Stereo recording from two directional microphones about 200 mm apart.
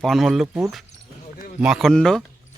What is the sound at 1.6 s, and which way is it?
Speech, centre (ahead or behind).